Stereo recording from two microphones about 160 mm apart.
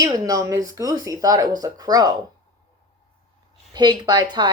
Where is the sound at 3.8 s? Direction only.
25° right (ahead or behind).